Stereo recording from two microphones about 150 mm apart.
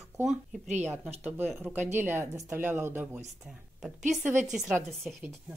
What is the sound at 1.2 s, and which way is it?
Speech, 15° right (ahead or behind).